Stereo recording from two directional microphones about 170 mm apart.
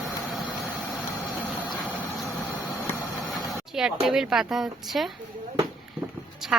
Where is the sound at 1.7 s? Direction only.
Centre (ahead or behind).